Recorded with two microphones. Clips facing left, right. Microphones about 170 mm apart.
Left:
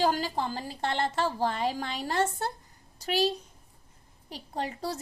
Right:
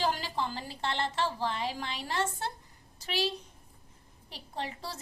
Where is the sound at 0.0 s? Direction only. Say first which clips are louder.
Left 4 dB; 45° left (ahead or behind).